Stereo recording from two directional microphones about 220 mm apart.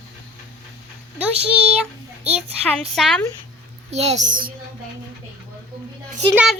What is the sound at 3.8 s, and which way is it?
Speech, 30° right (ahead or behind).